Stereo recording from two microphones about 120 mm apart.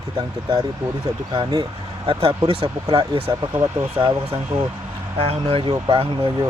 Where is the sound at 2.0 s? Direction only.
45° right (ahead or behind).